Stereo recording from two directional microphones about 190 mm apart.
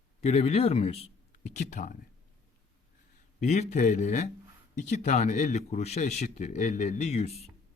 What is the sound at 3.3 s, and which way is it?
Speech, 40° left (ahead or behind).